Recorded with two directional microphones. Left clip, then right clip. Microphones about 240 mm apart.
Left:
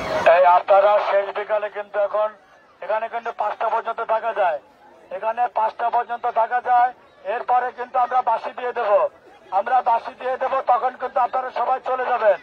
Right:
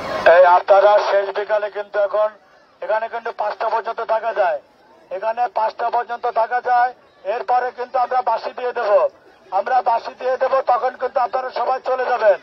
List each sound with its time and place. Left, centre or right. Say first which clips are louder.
0.2 s speech: right 3 dB; right